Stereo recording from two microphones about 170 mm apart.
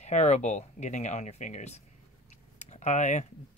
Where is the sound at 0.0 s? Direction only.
40° left (ahead or behind).